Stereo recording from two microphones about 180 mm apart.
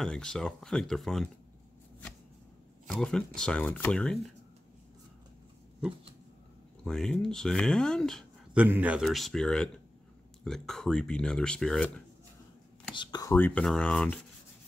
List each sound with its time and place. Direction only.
0.0 s speech: 5° left (ahead or behind)
2.9 s speech: 5° left (ahead or behind)
6.8 s speech: 5° left (ahead or behind)
8.6 s speech: 10° right (ahead or behind)
12.9 s speech: 25° left (ahead or behind)
13.3 s speech: 10° left (ahead or behind)